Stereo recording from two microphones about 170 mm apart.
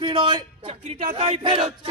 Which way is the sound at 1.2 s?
30° right (ahead or behind).